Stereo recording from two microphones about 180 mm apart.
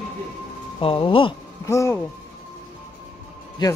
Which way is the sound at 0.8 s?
30° left (ahead or behind).